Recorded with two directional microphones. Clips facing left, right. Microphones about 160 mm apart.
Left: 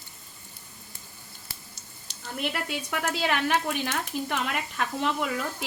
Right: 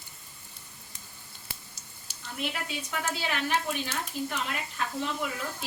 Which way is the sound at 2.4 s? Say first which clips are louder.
Left 3 dB; 60° left (ahead or behind).